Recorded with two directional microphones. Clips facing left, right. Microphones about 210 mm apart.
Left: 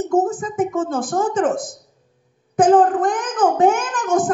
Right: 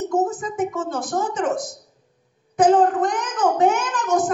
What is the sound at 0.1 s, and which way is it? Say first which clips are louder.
A woman's voice: left 5 dB; 50° left (ahead or behind).